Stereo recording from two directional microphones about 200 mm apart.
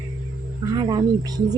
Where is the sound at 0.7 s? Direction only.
20° right (ahead or behind).